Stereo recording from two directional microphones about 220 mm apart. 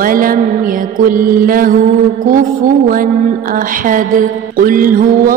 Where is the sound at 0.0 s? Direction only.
40° right (ahead or behind).